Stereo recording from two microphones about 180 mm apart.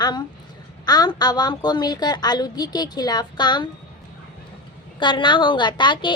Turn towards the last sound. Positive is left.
turn(degrees=25)  # may be behind; listen again after turning